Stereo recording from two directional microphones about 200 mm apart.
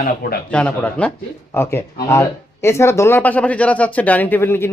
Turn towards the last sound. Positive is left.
turn(degrees=10)  # may be behind; listen again after turning